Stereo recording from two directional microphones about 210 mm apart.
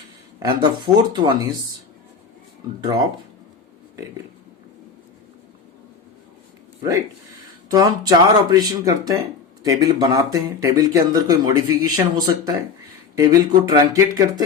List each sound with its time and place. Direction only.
0.4 s speech: 20° right (ahead or behind)
2.8 s speech: 20° right (ahead or behind)
7.7 s speech: 20° right (ahead or behind)